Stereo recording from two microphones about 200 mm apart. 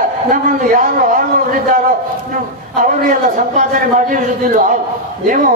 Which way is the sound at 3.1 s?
45° right (ahead or behind).